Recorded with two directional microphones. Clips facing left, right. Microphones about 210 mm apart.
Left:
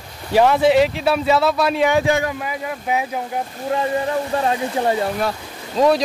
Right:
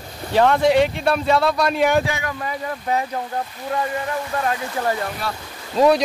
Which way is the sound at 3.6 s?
25° left (ahead or behind).